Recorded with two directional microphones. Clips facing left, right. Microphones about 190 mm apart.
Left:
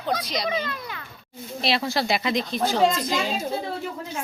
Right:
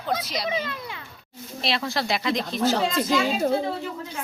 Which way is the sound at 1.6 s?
Centre (ahead or behind).